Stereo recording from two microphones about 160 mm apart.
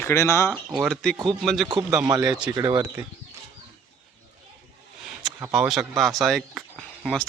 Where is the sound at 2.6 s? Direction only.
20° right (ahead or behind).